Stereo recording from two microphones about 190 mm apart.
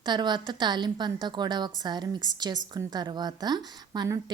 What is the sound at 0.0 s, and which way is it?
A woman's voice, 25° right (ahead or behind).